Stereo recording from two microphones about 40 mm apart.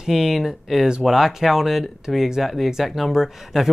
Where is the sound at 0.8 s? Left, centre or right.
Centre.